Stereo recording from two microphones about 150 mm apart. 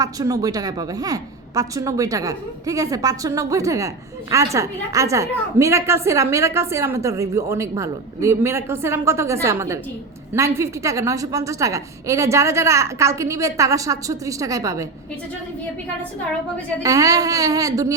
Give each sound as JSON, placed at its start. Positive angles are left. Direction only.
{"t": 0.0, "sound": "a woman's voice", "side_deg": -25}
{"t": 16.8, "sound": "a woman's voice", "side_deg": -20}